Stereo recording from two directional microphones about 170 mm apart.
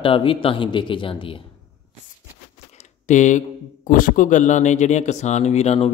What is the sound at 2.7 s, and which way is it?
Speech, 45° left (ahead or behind).